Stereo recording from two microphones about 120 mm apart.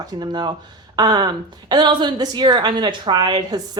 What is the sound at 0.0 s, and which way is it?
A woman's voice, 35° right (ahead or behind).